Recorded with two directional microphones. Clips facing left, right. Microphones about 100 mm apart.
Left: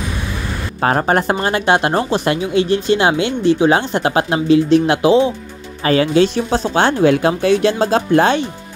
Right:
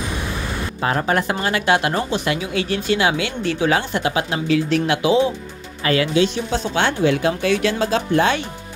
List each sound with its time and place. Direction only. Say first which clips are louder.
0.7 s speech: left 5 dB; 45° left (ahead or behind)
4.0 s speech: left 5 dB; 45° left (ahead or behind)
4.5 s speech: left 7 dB; 30° left (ahead or behind)
7.0 s speech: left 5 dB; 50° left (ahead or behind)
7.4 s speech: left 5 dB; 35° left (ahead or behind)